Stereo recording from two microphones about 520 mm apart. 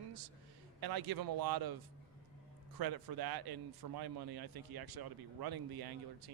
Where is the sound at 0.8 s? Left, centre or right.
Right.